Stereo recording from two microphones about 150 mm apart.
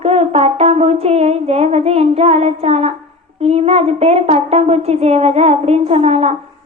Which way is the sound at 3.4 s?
45° right (ahead or behind).